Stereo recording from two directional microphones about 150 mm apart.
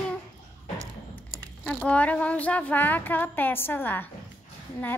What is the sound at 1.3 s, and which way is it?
A child's voice, 10° left (ahead or behind).